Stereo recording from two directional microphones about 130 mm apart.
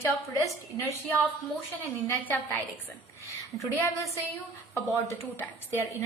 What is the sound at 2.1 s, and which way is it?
A woman's voice, 15° left (ahead or behind).